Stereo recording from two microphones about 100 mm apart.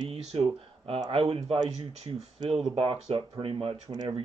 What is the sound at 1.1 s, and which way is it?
Speech, 70° right (ahead or behind).